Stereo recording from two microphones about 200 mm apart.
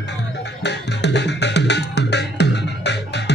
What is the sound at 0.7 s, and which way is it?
Music, 60° left (ahead or behind).